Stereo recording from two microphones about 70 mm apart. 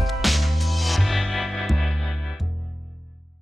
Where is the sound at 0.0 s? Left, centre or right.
Centre.